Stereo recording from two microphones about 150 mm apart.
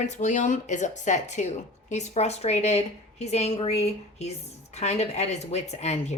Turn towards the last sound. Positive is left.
turn(degrees=50)  # may be behind; listen again after turning